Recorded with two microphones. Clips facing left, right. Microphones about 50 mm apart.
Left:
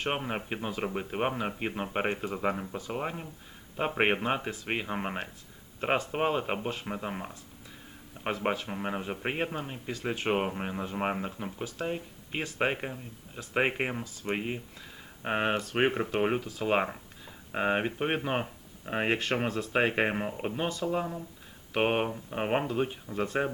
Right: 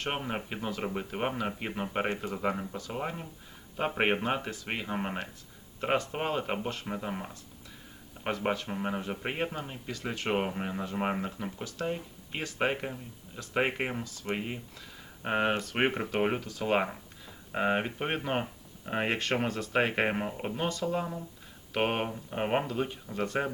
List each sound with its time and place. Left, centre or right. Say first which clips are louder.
0.0 s speech: left 2 dB; centre
0.5 s a man's voice: left 1 dB; left
0.8 s speech: left 3 dB; centre
1.5 s speech: left 1 dB; left
8.4 s a man's voice: even; centre
10.7 s a man's voice: even; left
10.9 s speech: even; centre
15.5 s speech: left 2 dB; centre
16.6 s a man's voice: right 1 dB; centre
18.9 s a man's voice: left 1 dB; centre
22.6 s a man's voice: left 2 dB; left
23.1 s speech: left 1 dB; centre